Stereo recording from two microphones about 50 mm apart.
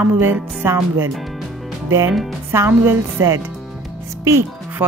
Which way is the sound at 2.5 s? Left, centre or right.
Right.